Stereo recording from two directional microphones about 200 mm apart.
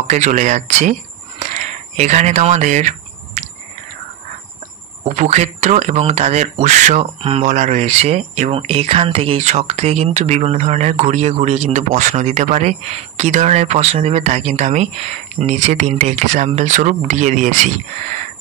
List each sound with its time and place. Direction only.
0.0 s speech: 35° right (ahead or behind)
3.4 s a sound: 35° right (ahead or behind)
5.0 s speech: 35° right (ahead or behind)